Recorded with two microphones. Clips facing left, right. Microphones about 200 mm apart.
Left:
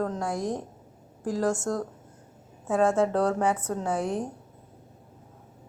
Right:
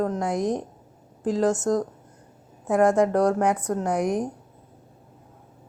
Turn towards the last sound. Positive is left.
turn(degrees=-15)  # may be behind; listen again after turning